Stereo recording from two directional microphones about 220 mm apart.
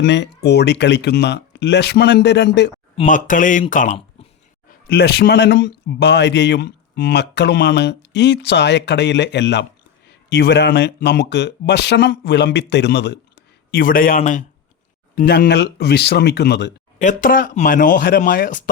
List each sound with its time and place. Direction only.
0.0 s a man's voice: 50° left (ahead or behind)
2.9 s speech: 30° left (ahead or behind)
4.9 s a man's voice: 45° left (ahead or behind)
13.7 s a man's voice: 40° left (ahead or behind)
17.0 s speech: 35° left (ahead or behind)